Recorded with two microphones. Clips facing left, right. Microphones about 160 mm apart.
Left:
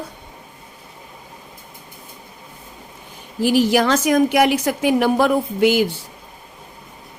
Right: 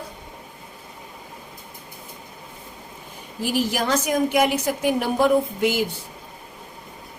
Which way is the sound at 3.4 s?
75° left (ahead or behind).